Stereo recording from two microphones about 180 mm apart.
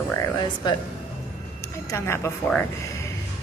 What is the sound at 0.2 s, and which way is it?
Speech, 25° left (ahead or behind).